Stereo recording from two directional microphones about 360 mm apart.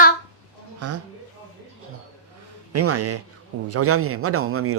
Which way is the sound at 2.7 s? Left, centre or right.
Right.